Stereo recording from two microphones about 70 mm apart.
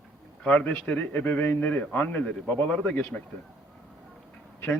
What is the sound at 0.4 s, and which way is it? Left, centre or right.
A man's voice, left.